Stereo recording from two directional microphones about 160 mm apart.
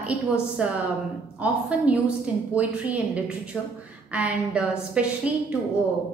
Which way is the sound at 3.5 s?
Centre (ahead or behind).